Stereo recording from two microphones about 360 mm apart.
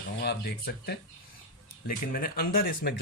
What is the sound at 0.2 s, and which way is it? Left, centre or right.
Speech, left.